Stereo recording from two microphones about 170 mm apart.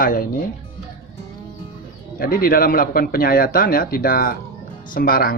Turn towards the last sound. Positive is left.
turn(degrees=60)  # may be behind; listen again after turning